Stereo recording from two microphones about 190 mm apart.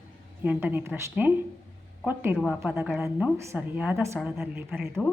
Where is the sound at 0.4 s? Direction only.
10° right (ahead or behind).